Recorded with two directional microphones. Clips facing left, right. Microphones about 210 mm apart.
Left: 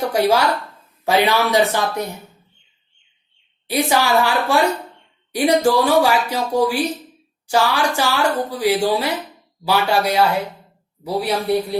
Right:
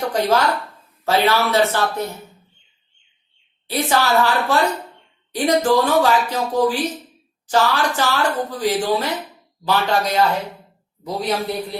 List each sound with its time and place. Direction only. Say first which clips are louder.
0.1 s speech: left 1 dB; 10° left (ahead or behind)
3.7 s speech: left 1 dB; 15° left (ahead or behind)